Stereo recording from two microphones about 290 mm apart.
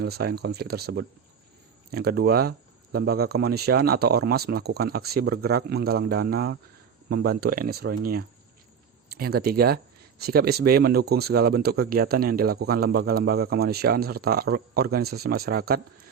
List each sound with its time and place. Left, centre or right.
0.0 s speech: right